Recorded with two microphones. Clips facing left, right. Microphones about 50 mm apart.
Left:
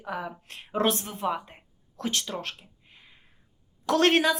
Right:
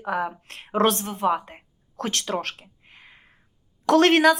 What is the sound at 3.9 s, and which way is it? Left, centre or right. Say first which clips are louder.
Speech: right 5 dB; right.